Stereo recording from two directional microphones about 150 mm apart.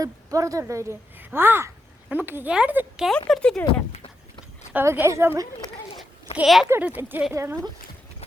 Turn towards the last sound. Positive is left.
turn(degrees=-15)  # may be behind; listen again after turning